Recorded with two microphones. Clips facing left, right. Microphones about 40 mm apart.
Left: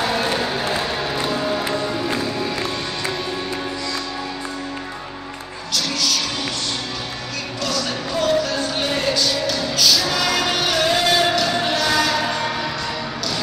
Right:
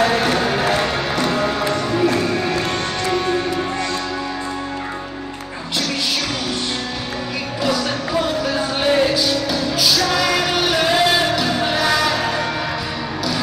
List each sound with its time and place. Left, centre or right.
1.1 s music: right
7.6 s music: centre